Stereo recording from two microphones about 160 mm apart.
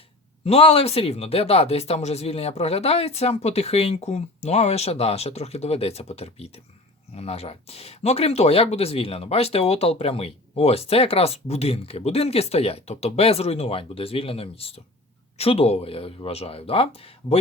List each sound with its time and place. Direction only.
0.4 s speech: 40° left (ahead or behind)